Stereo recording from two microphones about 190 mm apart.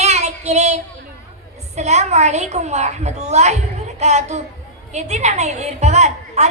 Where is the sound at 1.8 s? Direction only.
35° right (ahead or behind).